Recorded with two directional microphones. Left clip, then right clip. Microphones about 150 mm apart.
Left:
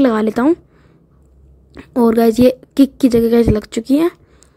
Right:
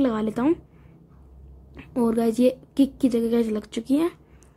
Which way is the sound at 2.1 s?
50° left (ahead or behind).